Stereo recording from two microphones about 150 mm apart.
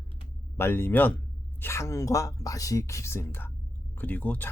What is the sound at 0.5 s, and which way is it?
Speech, 15° left (ahead or behind).